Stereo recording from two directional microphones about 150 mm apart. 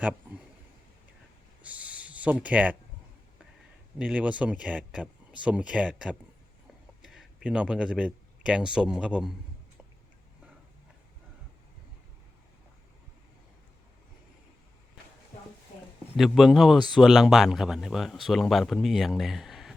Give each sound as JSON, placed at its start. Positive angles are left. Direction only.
{"t": 1.6, "sound": "a sound", "side_deg": -10}
{"t": 3.9, "sound": "speech", "side_deg": -10}
{"t": 16.1, "sound": "speech", "side_deg": 0}